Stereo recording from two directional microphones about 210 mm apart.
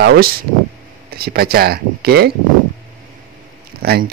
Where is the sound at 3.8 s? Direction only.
50° right (ahead or behind).